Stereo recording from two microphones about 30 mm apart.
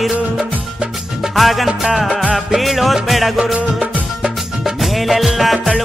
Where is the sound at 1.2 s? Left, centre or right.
Centre.